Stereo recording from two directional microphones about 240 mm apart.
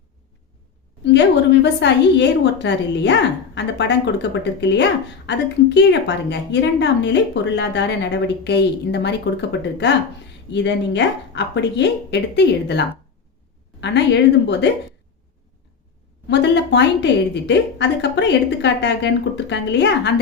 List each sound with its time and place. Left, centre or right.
1.6 s speech: left
13.8 s speech: left
16.2 s speech: left